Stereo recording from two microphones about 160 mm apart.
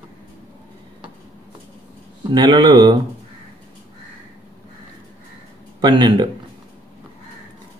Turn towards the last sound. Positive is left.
turn(degrees=-25)  # may be behind; listen again after turning